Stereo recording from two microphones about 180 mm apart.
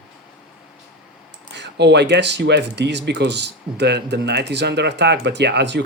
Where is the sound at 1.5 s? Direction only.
70° right (ahead or behind).